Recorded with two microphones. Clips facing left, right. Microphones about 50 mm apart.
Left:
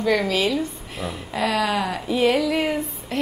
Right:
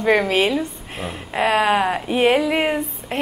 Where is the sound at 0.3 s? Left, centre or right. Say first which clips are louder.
Right 3 dB; right.